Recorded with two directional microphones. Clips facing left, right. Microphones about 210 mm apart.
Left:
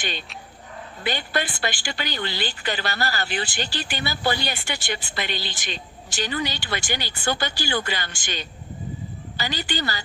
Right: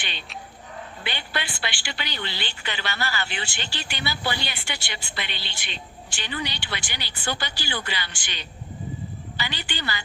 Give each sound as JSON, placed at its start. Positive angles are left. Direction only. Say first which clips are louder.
{"t": 0.0, "sound": "a woman's voice", "louder": "left 5 dB", "side_deg": 45}